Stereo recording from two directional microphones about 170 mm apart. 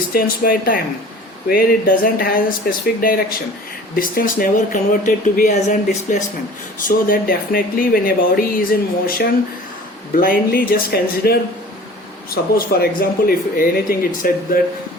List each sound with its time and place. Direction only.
0.1 s speech: 60° left (ahead or behind)
10.2 s speech: 60° left (ahead or behind)